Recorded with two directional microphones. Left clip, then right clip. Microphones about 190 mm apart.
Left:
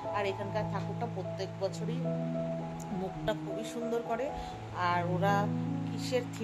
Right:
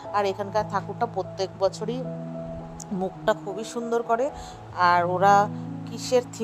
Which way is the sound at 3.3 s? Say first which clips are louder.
Right 10 dB; 35° right (ahead or behind).